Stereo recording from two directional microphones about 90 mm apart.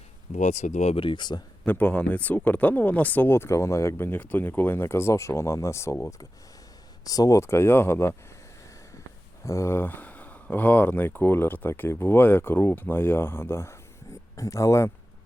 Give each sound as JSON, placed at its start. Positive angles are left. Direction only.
{"t": 0.9, "sound": "speech", "side_deg": 65}
{"t": 1.6, "sound": "speech", "side_deg": 20}
{"t": 9.4, "sound": "speech", "side_deg": 35}